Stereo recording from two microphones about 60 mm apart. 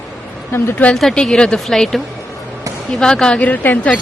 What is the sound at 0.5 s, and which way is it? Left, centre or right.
Speech, left.